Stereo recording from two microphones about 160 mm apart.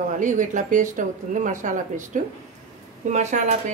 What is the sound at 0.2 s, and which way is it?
Speech, 50° right (ahead or behind).